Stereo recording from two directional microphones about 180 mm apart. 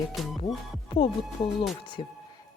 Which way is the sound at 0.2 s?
Centre (ahead or behind).